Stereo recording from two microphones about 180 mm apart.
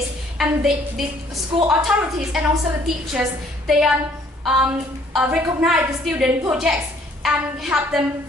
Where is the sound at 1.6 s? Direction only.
5° right (ahead or behind).